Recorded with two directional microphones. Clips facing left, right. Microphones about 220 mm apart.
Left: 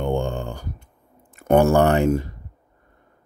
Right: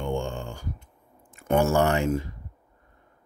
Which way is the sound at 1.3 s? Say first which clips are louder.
Left 6 dB; 60° left (ahead or behind).